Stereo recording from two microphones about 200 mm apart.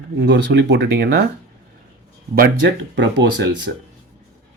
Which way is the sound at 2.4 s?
60° right (ahead or behind).